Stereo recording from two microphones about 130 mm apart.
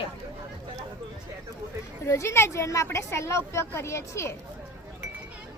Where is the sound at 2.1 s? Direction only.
20° left (ahead or behind).